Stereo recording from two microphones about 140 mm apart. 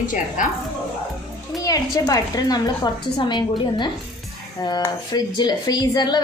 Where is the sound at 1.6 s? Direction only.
25° left (ahead or behind).